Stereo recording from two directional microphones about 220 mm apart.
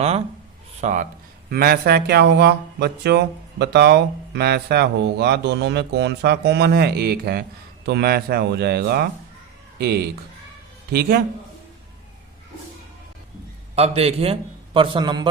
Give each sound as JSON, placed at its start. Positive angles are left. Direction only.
{"t": 0.8, "sound": "speech", "side_deg": -35}
{"t": 13.7, "sound": "a man's voice", "side_deg": -30}